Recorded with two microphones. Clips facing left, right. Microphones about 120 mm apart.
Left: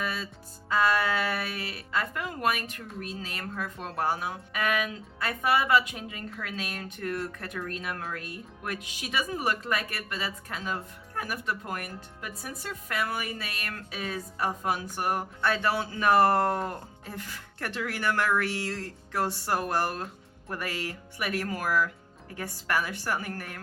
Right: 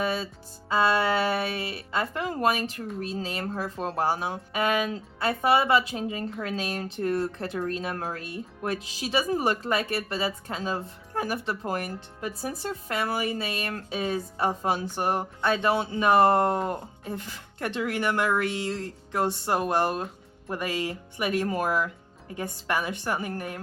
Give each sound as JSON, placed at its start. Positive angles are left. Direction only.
{"t": 0.0, "sound": "music", "side_deg": -30}
{"t": 0.7, "sound": "speech", "side_deg": -25}